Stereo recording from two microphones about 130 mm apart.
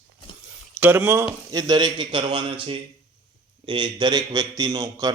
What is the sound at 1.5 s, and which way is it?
A man's voice, 30° right (ahead or behind).